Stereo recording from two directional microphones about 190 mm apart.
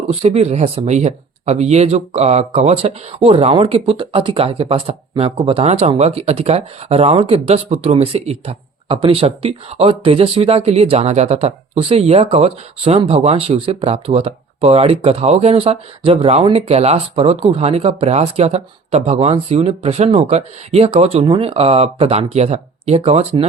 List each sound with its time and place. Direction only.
0.1 s speech: 35° right (ahead or behind)